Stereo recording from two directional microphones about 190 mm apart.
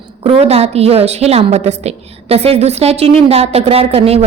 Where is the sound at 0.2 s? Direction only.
30° right (ahead or behind).